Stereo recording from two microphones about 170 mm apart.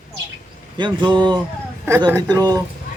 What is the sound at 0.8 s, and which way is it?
Speech, 25° right (ahead or behind).